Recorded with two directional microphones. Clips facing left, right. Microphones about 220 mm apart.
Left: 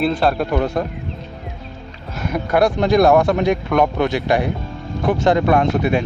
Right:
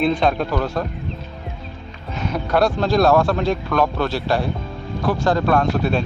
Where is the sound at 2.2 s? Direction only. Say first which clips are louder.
Left 2 dB; 10° left (ahead or behind).